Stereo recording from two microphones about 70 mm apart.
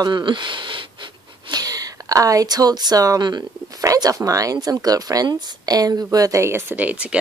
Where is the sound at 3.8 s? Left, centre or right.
Right.